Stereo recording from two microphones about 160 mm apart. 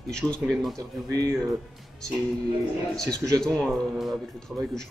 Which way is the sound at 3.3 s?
5° left (ahead or behind).